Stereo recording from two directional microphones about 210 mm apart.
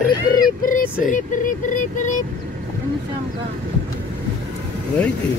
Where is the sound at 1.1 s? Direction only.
40° left (ahead or behind).